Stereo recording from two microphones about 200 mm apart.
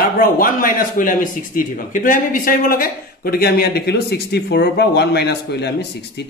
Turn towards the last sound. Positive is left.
turn(degrees=55)  # may be behind; listen again after turning